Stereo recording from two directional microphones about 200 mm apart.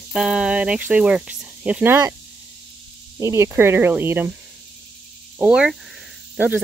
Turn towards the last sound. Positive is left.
turn(degrees=-10)  # may be behind; listen again after turning